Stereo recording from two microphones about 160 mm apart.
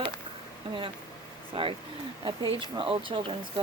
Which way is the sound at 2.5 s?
30° right (ahead or behind).